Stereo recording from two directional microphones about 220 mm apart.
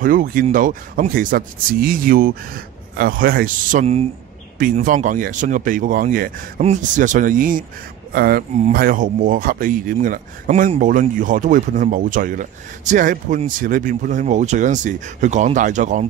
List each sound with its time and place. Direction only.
0.0 s speech: 40° right (ahead or behind)
4.6 s speech: 35° right (ahead or behind)